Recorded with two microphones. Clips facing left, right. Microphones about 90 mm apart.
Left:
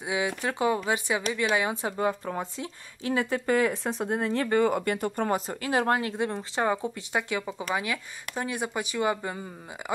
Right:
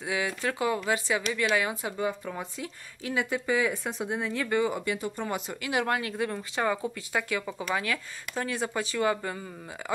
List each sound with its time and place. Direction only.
0.0 s speech: 20° left (ahead or behind); by 5.4 s 50° left (ahead or behind)
5.5 s speech: 35° left (ahead or behind); by 9.4 s 20° left (ahead or behind)